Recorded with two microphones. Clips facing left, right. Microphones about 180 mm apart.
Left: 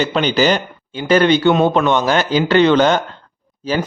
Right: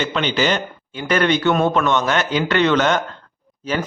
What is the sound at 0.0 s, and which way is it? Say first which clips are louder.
A man's voice: left 4 dB; 35° left (ahead or behind).